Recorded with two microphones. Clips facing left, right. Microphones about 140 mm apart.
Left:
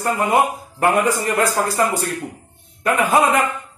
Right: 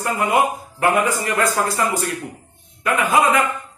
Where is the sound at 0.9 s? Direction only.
40° left (ahead or behind).